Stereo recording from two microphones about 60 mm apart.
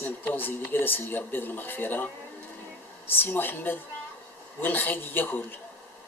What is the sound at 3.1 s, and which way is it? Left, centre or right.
Speech, left.